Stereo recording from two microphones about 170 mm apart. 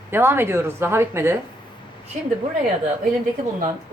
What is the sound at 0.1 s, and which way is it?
A woman's voice, 15° right (ahead or behind).